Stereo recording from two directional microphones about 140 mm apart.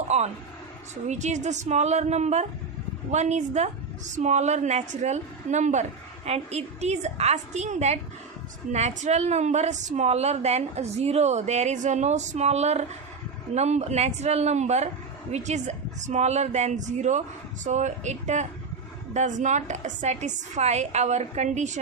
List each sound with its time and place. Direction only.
0.1 s a woman's voice: 50° right (ahead or behind)